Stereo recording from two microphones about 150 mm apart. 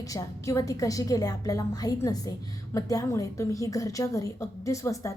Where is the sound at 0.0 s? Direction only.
20° left (ahead or behind).